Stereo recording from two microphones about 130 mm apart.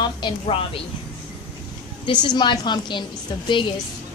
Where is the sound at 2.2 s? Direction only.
35° left (ahead or behind).